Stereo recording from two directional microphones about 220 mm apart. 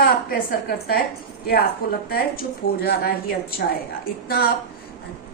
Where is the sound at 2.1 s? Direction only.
45° left (ahead or behind).